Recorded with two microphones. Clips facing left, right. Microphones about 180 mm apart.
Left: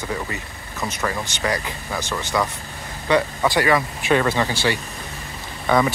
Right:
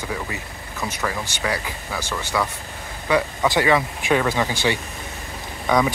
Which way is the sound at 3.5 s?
20° right (ahead or behind).